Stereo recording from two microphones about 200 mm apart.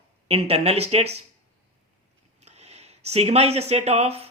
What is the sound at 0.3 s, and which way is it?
Speech, 30° right (ahead or behind).